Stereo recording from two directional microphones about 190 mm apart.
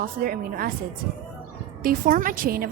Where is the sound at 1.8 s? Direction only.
45° right (ahead or behind).